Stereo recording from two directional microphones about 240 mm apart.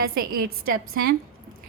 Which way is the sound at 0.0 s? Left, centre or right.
Right.